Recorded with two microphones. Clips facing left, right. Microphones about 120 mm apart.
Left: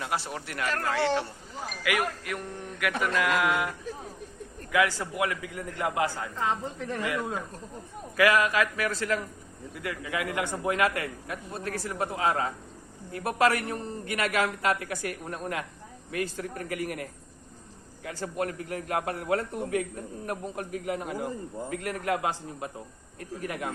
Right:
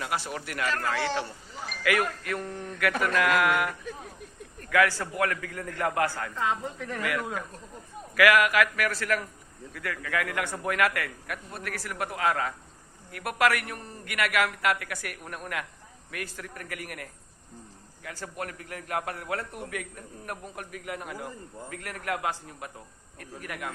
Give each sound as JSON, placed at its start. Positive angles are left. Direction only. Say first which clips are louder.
{"t": 0.0, "sound": "a man's voice", "louder": "even", "side_deg": 25}
{"t": 1.8, "sound": "a man's voice", "louder": "right 2 dB", "side_deg": 15}
{"t": 6.3, "sound": "a man's voice", "louder": "even", "side_deg": 30}